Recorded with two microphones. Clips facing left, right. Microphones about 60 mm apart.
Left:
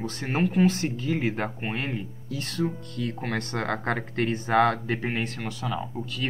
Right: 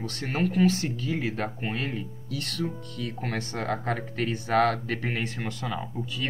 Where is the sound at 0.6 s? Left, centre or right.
Left.